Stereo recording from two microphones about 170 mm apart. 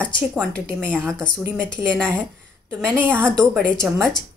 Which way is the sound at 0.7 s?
10° right (ahead or behind).